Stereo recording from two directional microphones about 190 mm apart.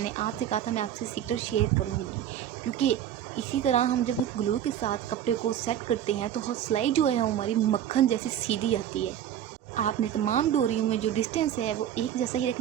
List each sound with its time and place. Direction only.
0.0 s speech: 35° left (ahead or behind)
2.7 s speech: 35° left (ahead or behind)